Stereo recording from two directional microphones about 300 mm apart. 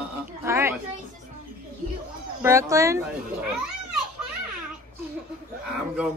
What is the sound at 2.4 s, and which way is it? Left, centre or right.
Speech, centre.